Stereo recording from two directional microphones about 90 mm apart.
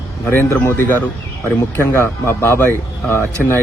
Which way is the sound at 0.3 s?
25° left (ahead or behind).